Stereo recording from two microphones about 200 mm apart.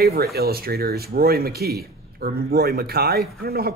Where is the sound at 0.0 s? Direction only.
50° right (ahead or behind).